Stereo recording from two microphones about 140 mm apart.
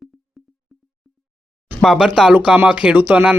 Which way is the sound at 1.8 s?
Centre (ahead or behind).